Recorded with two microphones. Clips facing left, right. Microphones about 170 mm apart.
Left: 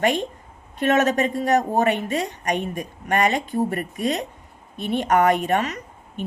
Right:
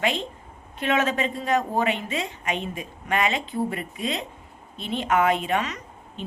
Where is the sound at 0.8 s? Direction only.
45° left (ahead or behind).